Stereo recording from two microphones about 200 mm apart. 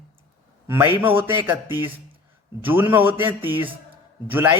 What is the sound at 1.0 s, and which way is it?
Speech, 10° right (ahead or behind).